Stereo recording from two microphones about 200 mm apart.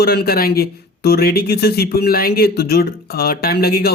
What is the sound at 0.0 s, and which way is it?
Speech, 50° left (ahead or behind).